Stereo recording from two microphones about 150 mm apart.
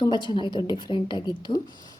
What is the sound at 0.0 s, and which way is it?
A woman's voice, 30° left (ahead or behind).